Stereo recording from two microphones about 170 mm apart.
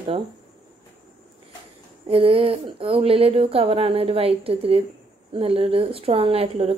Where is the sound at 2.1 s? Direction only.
30° right (ahead or behind).